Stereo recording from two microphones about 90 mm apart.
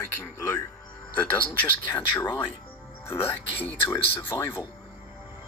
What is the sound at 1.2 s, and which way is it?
Speech, 20° left (ahead or behind).